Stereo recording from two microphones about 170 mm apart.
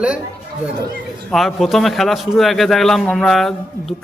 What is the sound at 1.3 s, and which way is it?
A man's voice, centre (ahead or behind).